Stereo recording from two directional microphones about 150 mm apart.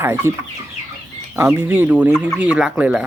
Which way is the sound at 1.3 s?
20° right (ahead or behind).